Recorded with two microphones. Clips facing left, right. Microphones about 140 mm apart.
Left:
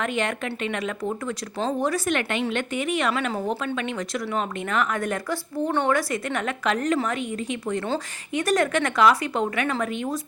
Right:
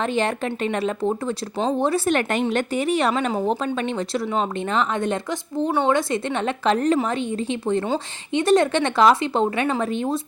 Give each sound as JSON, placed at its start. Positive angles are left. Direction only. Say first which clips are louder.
{"t": 0.0, "sound": "speech", "louder": "right 4 dB", "side_deg": -30}